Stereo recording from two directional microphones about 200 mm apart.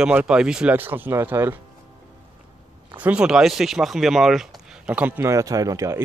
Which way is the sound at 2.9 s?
5° right (ahead or behind).